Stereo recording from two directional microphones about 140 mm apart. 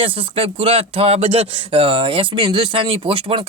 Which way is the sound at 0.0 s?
40° right (ahead or behind).